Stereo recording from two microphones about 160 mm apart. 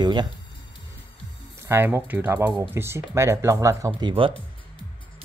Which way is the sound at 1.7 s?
15° right (ahead or behind).